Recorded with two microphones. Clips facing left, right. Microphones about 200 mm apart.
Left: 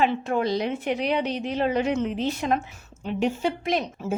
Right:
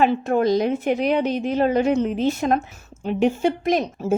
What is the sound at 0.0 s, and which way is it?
A woman's voice, 45° right (ahead or behind).